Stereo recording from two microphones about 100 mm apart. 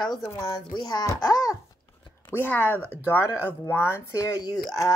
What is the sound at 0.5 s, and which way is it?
Speech, 45° left (ahead or behind).